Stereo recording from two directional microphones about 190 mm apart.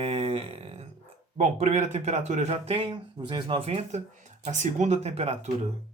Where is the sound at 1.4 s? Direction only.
35° right (ahead or behind).